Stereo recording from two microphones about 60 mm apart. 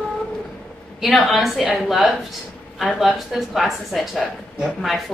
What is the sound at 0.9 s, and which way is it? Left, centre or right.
Speech, centre.